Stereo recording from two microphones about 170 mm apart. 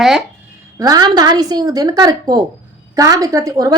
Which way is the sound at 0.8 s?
20° right (ahead or behind).